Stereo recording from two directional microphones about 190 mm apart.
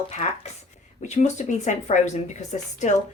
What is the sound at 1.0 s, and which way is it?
A woman's voice, 35° left (ahead or behind).